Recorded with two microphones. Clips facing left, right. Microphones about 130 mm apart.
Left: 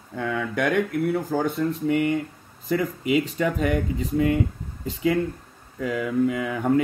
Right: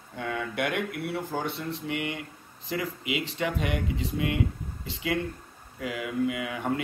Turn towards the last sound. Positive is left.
turn(degrees=40)  # may be behind; listen again after turning